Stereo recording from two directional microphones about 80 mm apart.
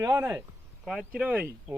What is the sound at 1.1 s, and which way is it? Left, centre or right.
Speech, centre.